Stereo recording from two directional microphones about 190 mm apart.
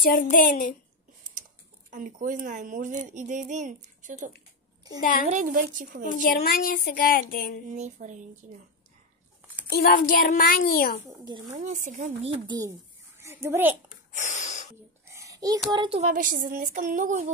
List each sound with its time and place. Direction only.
0.1 s speech: 45° left (ahead or behind)
1.9 s speech: 40° right (ahead or behind)
5.3 s speech: 40° right (ahead or behind)
6.1 s speech: 50° left (ahead or behind)
7.7 s speech: 40° right (ahead or behind)
9.7 s speech: 50° left (ahead or behind)
11.1 s speech: 20° right (ahead or behind)
11.5 s a child's voice: 40° right (ahead or behind); by 13.7 s 10° right (ahead or behind)
14.1 s a sound: 40° left (ahead or behind)
15.0 s a sound: 15° right (ahead or behind)
15.7 s speech: 25° right (ahead or behind)
16.0 s speech: 45° right (ahead or behind)